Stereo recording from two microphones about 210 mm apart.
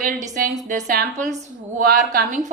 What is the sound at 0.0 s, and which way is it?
A woman's voice, 40° right (ahead or behind).